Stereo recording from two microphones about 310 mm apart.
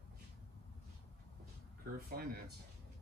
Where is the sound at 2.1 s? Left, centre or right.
Right.